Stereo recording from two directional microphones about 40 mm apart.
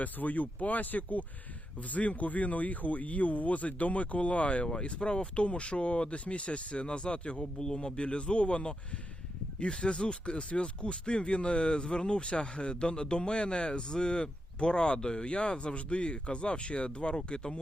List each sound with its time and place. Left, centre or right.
0.0 s speech: left